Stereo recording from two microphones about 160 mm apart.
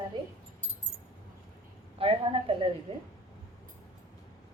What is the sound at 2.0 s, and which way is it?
Speech, 35° right (ahead or behind).